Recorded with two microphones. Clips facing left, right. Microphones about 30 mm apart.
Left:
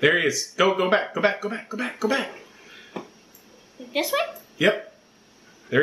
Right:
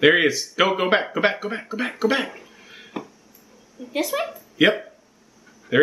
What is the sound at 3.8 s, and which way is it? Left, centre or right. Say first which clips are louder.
Speech: even; centre.